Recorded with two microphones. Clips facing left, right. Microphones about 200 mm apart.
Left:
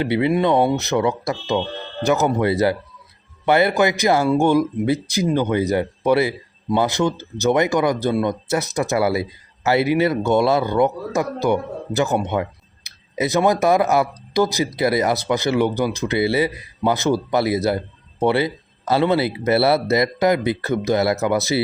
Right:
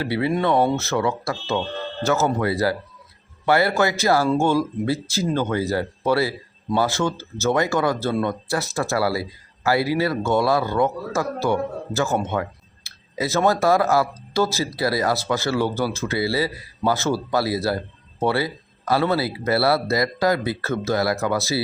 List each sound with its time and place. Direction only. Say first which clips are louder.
0.0 s speech: left 4 dB; 20° left (ahead or behind)